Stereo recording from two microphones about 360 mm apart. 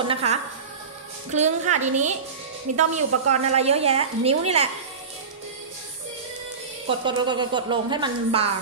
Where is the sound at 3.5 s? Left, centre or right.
Centre.